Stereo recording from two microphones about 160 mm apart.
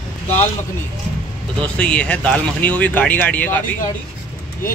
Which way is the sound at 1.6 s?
10° left (ahead or behind).